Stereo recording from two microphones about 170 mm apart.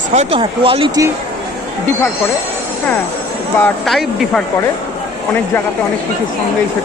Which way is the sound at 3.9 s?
Centre (ahead or behind).